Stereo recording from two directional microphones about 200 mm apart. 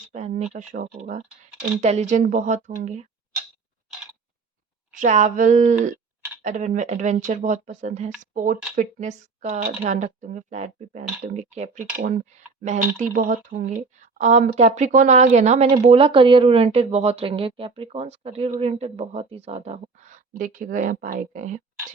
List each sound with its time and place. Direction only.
0.1 s a woman's voice: 35° right (ahead or behind)
3.9 s a sound: centre (ahead or behind)
4.9 s a woman's voice: 40° right (ahead or behind)